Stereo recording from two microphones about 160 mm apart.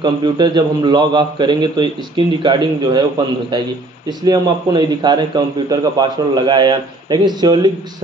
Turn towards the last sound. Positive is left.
turn(degrees=-25)  # may be behind; listen again after turning